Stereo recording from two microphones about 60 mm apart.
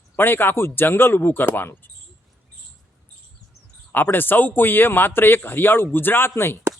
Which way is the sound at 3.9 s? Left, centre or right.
Left.